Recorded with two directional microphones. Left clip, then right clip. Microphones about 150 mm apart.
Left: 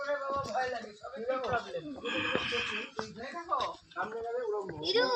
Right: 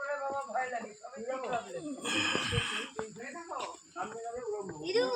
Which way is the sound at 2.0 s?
50° right (ahead or behind).